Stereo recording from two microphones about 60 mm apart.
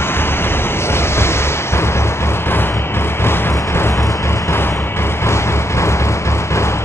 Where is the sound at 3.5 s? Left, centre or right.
Left.